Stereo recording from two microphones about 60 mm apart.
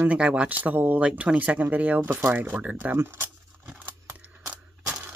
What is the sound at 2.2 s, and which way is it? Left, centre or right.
Speech, right.